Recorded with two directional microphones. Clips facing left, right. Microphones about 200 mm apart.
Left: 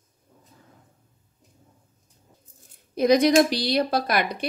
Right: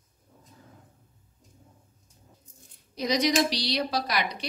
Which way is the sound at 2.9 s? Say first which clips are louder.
Left 8 dB; 55° left (ahead or behind).